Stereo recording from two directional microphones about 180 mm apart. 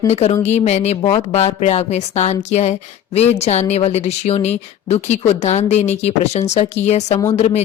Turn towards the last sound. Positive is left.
turn(degrees=40)  # may be behind; listen again after turning